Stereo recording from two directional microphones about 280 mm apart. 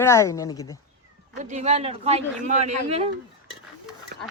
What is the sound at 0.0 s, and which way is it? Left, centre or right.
Speech, centre.